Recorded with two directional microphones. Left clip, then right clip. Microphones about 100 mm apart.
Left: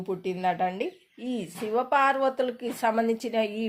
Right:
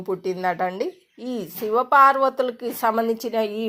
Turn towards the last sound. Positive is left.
turn(degrees=-20)  # may be behind; listen again after turning